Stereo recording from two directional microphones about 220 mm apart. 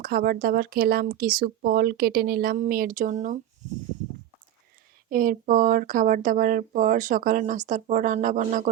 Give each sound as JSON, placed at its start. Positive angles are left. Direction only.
{"t": 0.0, "sound": "speech", "side_deg": -40}
{"t": 5.0, "sound": "speech", "side_deg": -40}